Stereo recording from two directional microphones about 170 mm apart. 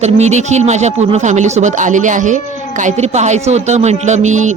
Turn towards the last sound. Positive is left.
turn(degrees=-45)  # may be behind; listen again after turning